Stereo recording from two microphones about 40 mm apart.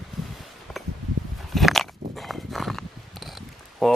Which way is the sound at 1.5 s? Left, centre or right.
Centre.